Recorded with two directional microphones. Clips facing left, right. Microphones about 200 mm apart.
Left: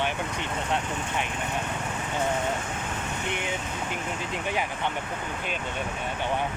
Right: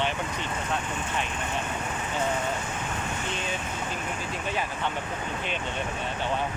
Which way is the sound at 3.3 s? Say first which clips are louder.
Left 5 dB; 15° left (ahead or behind).